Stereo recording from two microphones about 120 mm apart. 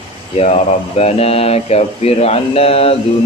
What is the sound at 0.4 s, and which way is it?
Speech, 60° left (ahead or behind).